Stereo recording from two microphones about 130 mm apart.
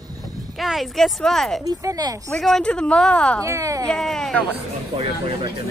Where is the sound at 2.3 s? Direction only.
5° left (ahead or behind).